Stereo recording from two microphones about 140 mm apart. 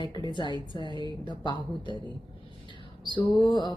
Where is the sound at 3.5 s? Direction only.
35° left (ahead or behind).